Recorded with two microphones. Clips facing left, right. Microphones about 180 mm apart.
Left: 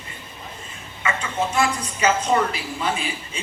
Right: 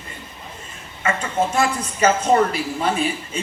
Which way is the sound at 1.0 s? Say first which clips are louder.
Right 3 dB; 45° right (ahead or behind).